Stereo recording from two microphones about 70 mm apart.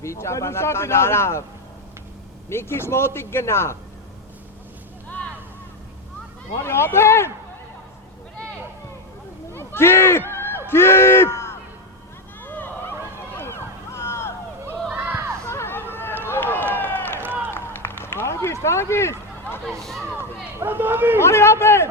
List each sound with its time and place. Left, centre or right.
0.0 s a man's voice: left
2.5 s a man's voice: left
6.5 s a man's voice: left
9.5 s a sound: left
10.7 s speech: left
12.4 s a sound: left
14.9 s a sound: right
15.4 s a sound: left
16.2 s run: left
17.2 s run: right
17.5 s run: left
19.8 s speech: centre
20.1 s speech: right
21.2 s a man's voice: left